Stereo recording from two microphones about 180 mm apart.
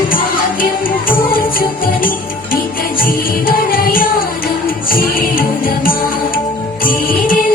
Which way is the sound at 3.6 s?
55° left (ahead or behind).